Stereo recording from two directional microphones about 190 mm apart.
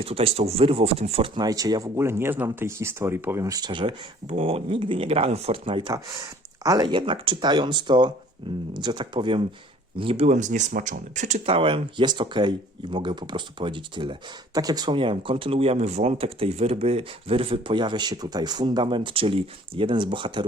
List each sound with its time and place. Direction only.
0.0 s speech: 30° right (ahead or behind)